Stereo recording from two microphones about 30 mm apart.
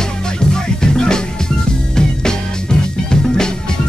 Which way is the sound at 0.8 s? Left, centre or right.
Left.